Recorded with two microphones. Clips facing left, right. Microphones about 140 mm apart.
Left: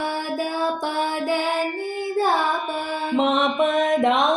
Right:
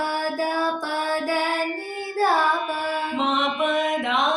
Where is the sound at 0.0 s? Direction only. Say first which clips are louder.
Right 1 dB; 20° left (ahead or behind).